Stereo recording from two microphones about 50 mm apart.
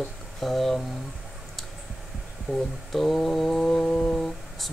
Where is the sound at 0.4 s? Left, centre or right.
Centre.